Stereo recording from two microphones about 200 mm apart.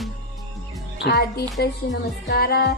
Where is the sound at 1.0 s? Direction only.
55° left (ahead or behind).